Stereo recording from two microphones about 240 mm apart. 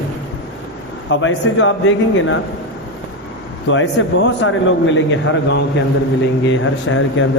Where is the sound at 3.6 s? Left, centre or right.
Left.